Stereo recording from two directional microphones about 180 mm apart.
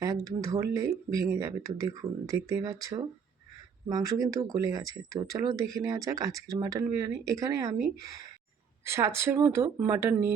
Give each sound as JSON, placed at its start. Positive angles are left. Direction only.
{"t": 0.0, "sound": "speech", "side_deg": -20}
{"t": 3.9, "sound": "speech", "side_deg": -20}